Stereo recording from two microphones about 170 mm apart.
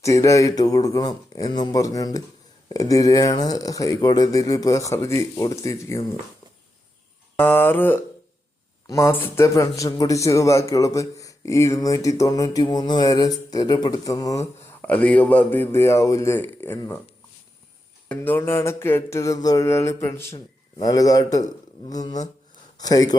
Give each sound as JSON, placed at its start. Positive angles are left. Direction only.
{"t": 0.0, "sound": "a man's voice", "side_deg": 20}
{"t": 7.3, "sound": "mantra", "side_deg": 10}
{"t": 8.9, "sound": "a man's voice", "side_deg": 15}
{"t": 14.8, "sound": "mantra", "side_deg": 10}
{"t": 18.1, "sound": "mantra", "side_deg": 10}
{"t": 21.8, "sound": "a man's voice", "side_deg": 20}